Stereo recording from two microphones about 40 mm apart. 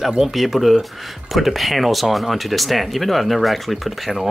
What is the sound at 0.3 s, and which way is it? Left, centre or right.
Speech, centre.